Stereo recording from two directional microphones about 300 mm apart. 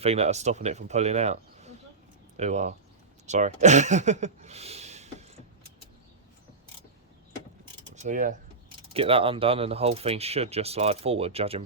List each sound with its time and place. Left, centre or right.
0.0 s speech: right
7.9 s speech: right